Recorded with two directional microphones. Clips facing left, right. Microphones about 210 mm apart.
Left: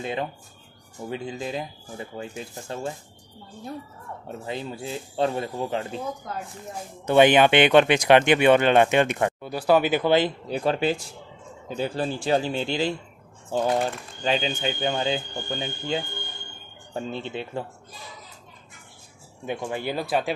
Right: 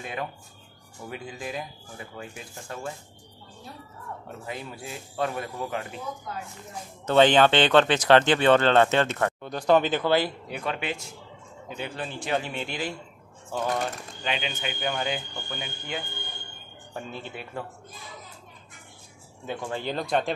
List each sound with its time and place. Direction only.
0.0 s speech: 25° left (ahead or behind)
4.5 s speech: 25° left (ahead or behind)
7.1 s speech: 10° left (ahead or behind)
10.5 s speech: 35° left (ahead or behind)
19.4 s speech: 15° left (ahead or behind)